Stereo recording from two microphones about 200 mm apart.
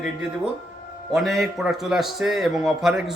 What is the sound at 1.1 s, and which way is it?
A man's voice, centre (ahead or behind).